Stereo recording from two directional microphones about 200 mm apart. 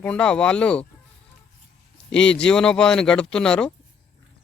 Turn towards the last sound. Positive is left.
turn(degrees=5)  # may be behind; listen again after turning